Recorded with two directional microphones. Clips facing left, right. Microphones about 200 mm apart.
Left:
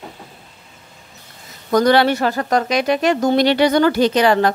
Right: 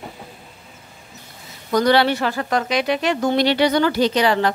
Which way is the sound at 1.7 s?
50° left (ahead or behind).